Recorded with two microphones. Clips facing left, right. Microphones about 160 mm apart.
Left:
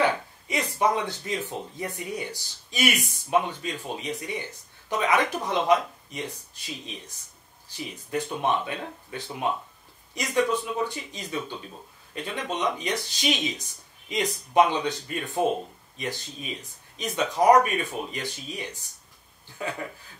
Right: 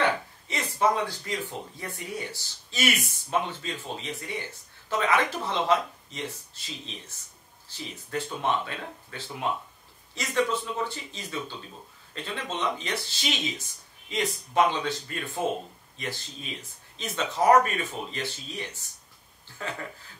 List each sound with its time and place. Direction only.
0.0 s speech: 15° left (ahead or behind)